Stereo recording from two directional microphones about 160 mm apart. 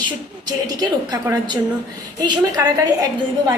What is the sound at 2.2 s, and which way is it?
Speech, 25° right (ahead or behind).